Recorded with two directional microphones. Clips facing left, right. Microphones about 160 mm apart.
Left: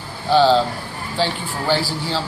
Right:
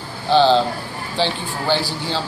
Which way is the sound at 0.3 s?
25° right (ahead or behind).